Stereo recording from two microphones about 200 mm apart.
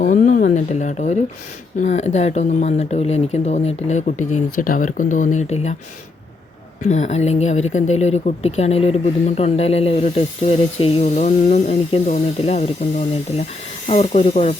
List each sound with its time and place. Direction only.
0.0 s speech: 40° left (ahead or behind)
6.8 s speech: 35° left (ahead or behind)
13.8 s speech: 35° left (ahead or behind)